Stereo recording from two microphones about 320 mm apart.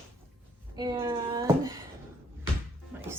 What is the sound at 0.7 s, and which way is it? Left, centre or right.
Speech, centre.